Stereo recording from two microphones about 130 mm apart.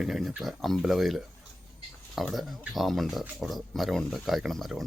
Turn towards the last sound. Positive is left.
turn(degrees=0)  # may be behind; listen again after turning